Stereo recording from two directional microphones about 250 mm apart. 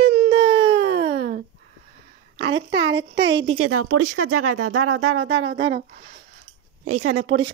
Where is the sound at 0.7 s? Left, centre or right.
Right.